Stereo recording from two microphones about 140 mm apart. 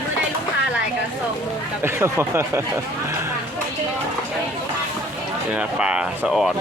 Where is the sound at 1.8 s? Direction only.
15° right (ahead or behind).